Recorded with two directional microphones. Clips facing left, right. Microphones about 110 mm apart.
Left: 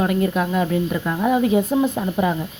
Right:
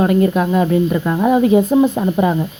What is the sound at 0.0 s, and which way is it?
Speech, 40° right (ahead or behind).